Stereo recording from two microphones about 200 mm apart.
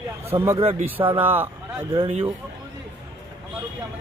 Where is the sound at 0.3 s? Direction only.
15° right (ahead or behind).